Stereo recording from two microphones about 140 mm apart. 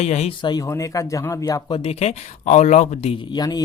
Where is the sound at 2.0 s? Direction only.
50° left (ahead or behind).